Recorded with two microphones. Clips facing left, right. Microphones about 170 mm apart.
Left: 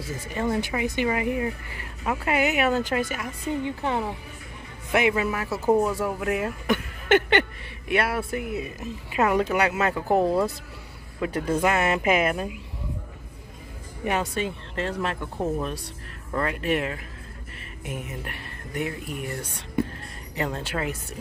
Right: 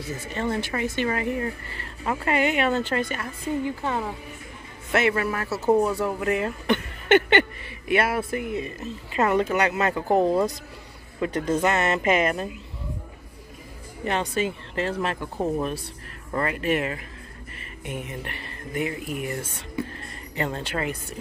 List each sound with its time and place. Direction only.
0.3 s speech: 10° left (ahead or behind)
5.5 s speech: 10° right (ahead or behind)
5.9 s speech: 5° left (ahead or behind)
14.0 s speech: 5° left (ahead or behind)